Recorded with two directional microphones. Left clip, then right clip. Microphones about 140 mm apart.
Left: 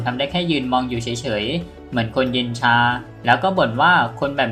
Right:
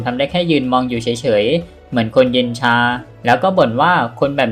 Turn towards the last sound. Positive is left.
turn(degrees=-35)  # may be behind; listen again after turning